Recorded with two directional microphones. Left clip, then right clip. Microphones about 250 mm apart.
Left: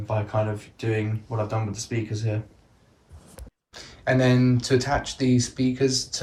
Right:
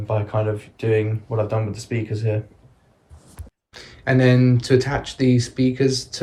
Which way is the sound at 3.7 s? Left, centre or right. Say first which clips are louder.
Right 2 dB; centre.